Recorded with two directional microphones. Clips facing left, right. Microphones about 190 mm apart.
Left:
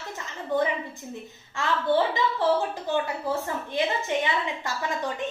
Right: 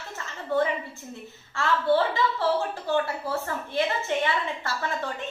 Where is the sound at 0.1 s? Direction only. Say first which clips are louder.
Right 1 dB; 15° left (ahead or behind).